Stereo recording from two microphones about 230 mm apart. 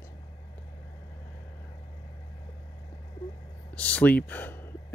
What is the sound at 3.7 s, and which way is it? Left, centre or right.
Speech, centre.